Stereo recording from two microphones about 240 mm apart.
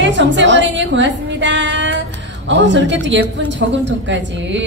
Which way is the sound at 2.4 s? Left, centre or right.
Right.